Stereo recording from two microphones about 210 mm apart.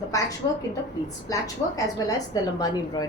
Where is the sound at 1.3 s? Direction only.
15° left (ahead or behind).